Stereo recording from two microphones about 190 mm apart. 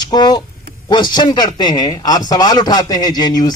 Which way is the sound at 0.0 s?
20° left (ahead or behind).